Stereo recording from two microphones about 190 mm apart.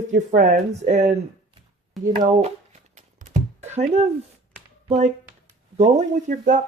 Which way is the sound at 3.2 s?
40° right (ahead or behind).